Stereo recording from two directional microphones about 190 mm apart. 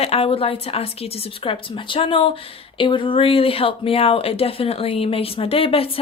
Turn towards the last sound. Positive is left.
turn(degrees=30)  # may be behind; listen again after turning